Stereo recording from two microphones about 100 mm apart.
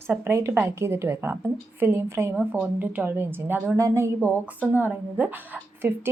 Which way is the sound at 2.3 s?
15° right (ahead or behind).